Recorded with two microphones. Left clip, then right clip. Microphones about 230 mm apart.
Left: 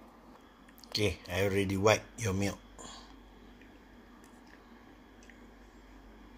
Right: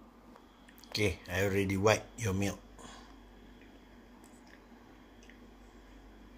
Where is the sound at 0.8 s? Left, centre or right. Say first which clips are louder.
Left 1 dB; centre.